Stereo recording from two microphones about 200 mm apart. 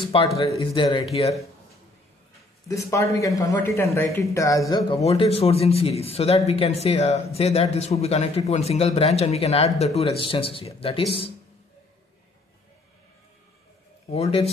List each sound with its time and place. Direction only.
0.1 s speech: 25° left (ahead or behind)
2.7 s speech: 15° left (ahead or behind)
14.1 s a man's voice: 30° left (ahead or behind)